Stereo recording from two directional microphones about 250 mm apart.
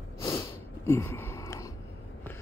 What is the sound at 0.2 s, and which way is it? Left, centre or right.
Snort, centre.